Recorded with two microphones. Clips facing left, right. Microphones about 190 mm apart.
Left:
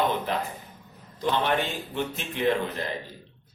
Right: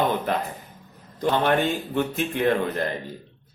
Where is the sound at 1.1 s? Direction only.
50° right (ahead or behind).